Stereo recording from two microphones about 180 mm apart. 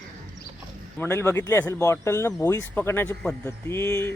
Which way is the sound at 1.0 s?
15° left (ahead or behind).